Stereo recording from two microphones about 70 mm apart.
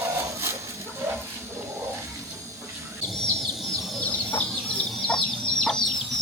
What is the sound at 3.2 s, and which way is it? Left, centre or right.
Chicken, centre.